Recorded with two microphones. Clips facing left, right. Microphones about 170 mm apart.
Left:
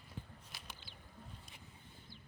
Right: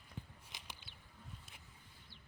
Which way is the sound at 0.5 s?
20° right (ahead or behind).